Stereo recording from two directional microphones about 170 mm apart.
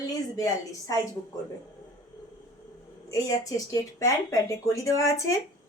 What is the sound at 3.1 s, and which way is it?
Speech, 20° left (ahead or behind).